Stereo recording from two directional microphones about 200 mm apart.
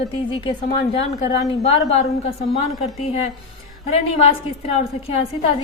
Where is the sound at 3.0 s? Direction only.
30° left (ahead or behind).